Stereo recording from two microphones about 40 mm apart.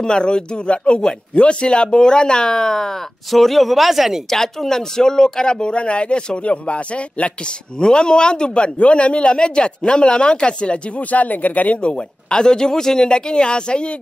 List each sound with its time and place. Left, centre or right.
0.0 s speech: left; by 4.2 s centre
4.3 s speech: centre
11.0 s speech: left
11.8 s speech: left